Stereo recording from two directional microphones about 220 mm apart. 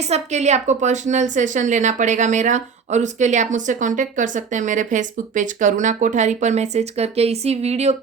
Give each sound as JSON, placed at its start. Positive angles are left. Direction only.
{"t": 0.1, "sound": "a woman's voice", "side_deg": -30}